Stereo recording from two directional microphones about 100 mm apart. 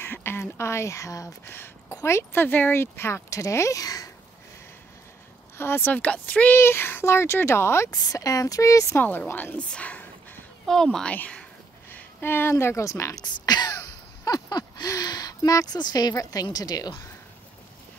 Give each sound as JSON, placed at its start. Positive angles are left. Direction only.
{"t": 0.0, "sound": "speech", "side_deg": 20}
{"t": 5.6, "sound": "speech", "side_deg": 20}
{"t": 9.3, "sound": "a sound", "side_deg": 20}
{"t": 10.7, "sound": "speech", "side_deg": 5}
{"t": 13.3, "sound": "throat clearing", "side_deg": 45}
{"t": 14.2, "sound": "a woman's voice", "side_deg": 40}